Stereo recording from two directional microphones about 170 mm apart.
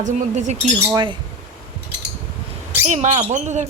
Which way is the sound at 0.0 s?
45° right (ahead or behind).